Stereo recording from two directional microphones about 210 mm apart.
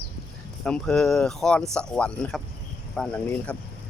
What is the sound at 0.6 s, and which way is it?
Speech, 5° left (ahead or behind).